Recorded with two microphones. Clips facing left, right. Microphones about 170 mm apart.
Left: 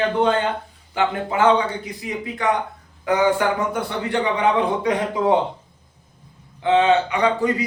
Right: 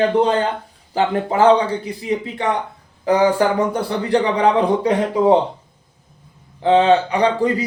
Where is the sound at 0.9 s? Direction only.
35° right (ahead or behind).